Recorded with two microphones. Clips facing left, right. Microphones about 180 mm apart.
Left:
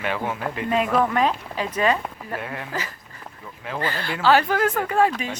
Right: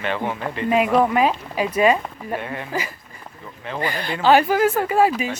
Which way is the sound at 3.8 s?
15° right (ahead or behind).